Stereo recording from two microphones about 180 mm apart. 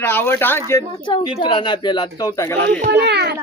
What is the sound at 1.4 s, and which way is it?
Speech, 25° left (ahead or behind).